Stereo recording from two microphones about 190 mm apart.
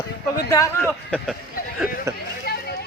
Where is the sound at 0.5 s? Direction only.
15° left (ahead or behind).